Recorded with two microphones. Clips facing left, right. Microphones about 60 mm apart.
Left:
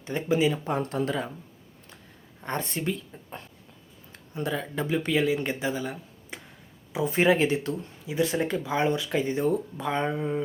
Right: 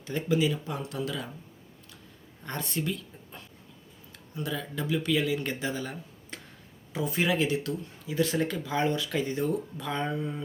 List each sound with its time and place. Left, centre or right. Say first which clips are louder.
0.0 s speech: left 2 dB; left
2.4 s speech: left 3 dB; left
4.1 s speech: left 4 dB; left; by 6.4 s centre
7.0 s speech: left 5 dB; left